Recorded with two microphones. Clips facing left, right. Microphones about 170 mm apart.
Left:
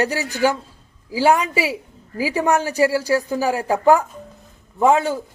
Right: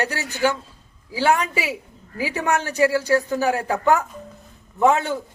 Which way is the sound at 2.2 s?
10° left (ahead or behind).